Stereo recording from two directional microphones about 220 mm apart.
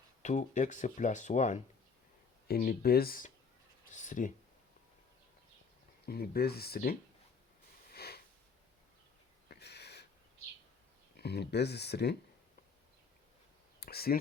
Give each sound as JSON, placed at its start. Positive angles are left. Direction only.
{"t": 0.2, "sound": "speech", "side_deg": 35}
{"t": 6.1, "sound": "speech", "side_deg": 45}
{"t": 7.9, "sound": "sniff", "side_deg": 45}
{"t": 9.5, "sound": "a sound", "side_deg": 50}
{"t": 11.2, "sound": "speech", "side_deg": 50}
{"t": 13.7, "sound": "a sound", "side_deg": 45}